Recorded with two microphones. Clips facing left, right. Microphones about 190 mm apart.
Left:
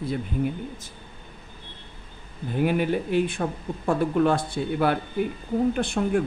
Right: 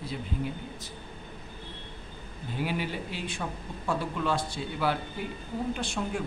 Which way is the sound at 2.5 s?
55° left (ahead or behind).